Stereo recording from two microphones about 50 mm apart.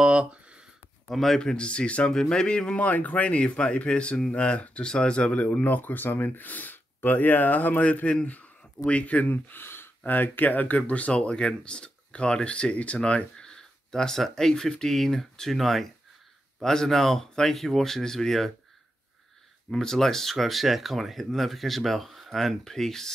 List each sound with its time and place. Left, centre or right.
0.0 s a sound: right
1.0 s speech: centre
1.4 s speech: centre
19.7 s speech: centre